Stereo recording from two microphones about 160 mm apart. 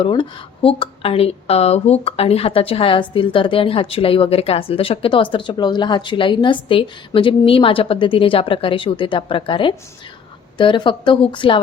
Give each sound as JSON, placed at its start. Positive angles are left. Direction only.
{"t": 0.0, "sound": "speech", "side_deg": 30}